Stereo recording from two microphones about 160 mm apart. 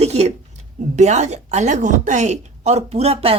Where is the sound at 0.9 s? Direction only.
45° right (ahead or behind).